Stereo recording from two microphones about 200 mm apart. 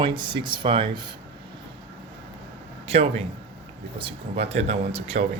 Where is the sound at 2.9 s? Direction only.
30° right (ahead or behind).